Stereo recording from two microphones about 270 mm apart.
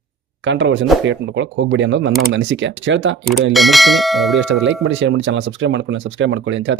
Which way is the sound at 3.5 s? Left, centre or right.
Centre.